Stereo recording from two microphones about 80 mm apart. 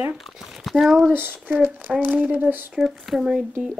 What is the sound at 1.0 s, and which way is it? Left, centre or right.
Speech, right.